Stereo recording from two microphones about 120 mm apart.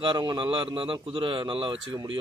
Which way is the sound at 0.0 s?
40° right (ahead or behind).